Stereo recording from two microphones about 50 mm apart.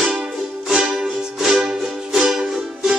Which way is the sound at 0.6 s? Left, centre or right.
Centre.